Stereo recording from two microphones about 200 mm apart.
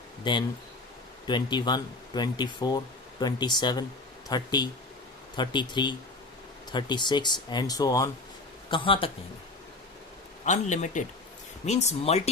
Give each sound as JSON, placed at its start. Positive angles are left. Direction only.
{"t": 0.3, "sound": "speech", "side_deg": 20}
{"t": 10.4, "sound": "speech", "side_deg": 35}